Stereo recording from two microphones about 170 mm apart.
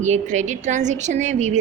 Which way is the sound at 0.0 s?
45° right (ahead or behind).